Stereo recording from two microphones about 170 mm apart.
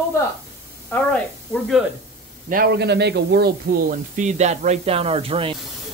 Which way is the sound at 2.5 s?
60° right (ahead or behind).